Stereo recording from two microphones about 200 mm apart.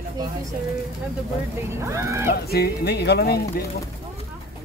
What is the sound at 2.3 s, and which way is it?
Speech, 50° left (ahead or behind).